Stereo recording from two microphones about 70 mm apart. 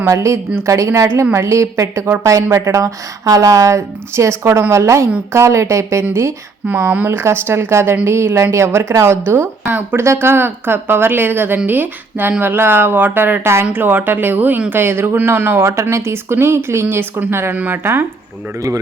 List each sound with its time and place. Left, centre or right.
0.1 s speech: right
6.9 s speech: right
7.2 s speech: right
13.4 s speech: right
15.6 s speech: right